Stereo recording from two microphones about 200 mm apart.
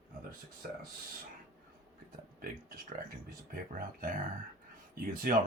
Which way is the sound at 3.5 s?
45° right (ahead or behind).